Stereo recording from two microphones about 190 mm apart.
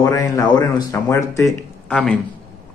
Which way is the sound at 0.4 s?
20° left (ahead or behind).